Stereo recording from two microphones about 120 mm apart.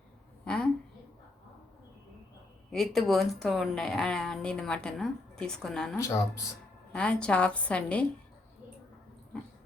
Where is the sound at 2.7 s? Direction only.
5° left (ahead or behind).